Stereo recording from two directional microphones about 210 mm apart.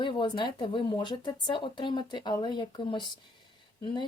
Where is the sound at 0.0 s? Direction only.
20° left (ahead or behind).